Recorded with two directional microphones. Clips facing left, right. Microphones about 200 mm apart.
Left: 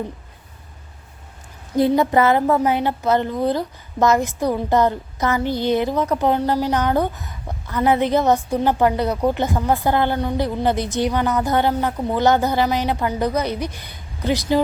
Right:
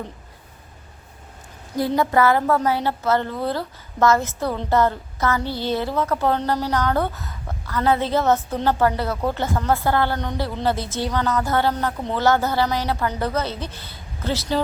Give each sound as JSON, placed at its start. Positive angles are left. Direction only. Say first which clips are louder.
{"t": 1.7, "sound": "a woman's voice", "louder": "left 4 dB", "side_deg": 20}